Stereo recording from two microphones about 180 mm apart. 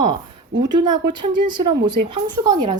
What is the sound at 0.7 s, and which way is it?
A woman's voice, 25° right (ahead or behind).